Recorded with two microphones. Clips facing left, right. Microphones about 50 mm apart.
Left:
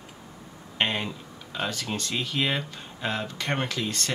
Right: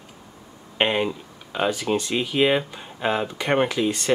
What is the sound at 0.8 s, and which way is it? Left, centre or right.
Speech, centre.